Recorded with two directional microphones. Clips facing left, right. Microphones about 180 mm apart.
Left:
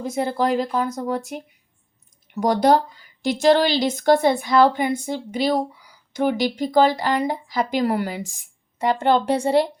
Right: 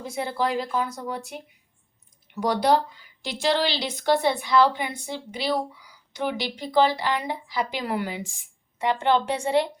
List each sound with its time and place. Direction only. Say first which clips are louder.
0.0 s a woman's voice: left 5 dB; 45° left (ahead or behind)